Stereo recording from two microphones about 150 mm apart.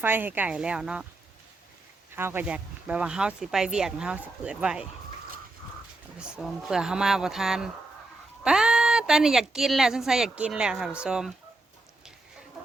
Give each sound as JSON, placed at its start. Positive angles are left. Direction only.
{"t": 0.0, "sound": "speech", "side_deg": -15}
{"t": 2.1, "sound": "speech", "side_deg": -15}
{"t": 6.1, "sound": "speech", "side_deg": -5}